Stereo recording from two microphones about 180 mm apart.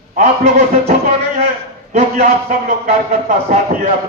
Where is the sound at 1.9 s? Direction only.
50° right (ahead or behind).